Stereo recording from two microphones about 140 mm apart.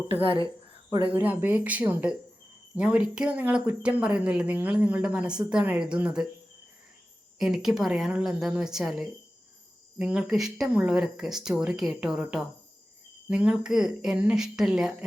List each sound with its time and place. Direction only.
0.1 s speech: 40° right (ahead or behind)
1.1 s speech: 10° right (ahead or behind)
7.3 s speech: 5° right (ahead or behind)